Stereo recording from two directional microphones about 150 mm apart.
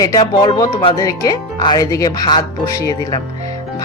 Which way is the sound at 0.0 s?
25° left (ahead or behind).